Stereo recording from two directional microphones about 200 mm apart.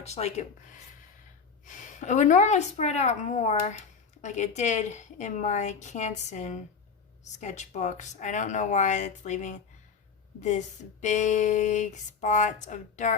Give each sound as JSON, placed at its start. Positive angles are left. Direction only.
{"t": 0.0, "sound": "speech", "side_deg": 30}
{"t": 1.6, "sound": "speech", "side_deg": 40}
{"t": 11.0, "sound": "speech", "side_deg": 35}